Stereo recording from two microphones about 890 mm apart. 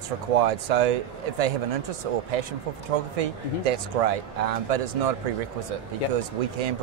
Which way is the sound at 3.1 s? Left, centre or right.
Right.